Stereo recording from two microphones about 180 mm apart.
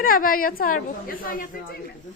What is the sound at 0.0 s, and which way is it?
A woman's voice, 50° left (ahead or behind).